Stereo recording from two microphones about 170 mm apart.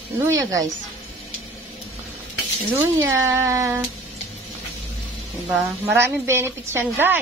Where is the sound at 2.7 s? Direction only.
15° right (ahead or behind).